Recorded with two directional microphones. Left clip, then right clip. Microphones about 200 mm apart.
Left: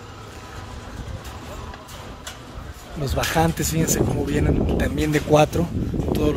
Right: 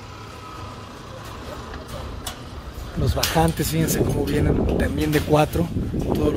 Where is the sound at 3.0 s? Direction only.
5° right (ahead or behind).